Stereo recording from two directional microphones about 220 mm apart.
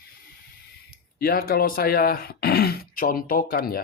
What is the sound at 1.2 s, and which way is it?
Speech, 45° left (ahead or behind).